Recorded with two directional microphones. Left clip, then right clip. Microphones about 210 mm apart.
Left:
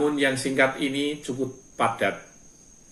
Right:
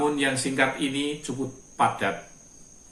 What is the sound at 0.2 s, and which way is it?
Speech, 15° right (ahead or behind).